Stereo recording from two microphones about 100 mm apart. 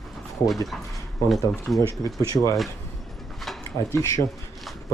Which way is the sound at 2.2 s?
35° left (ahead or behind).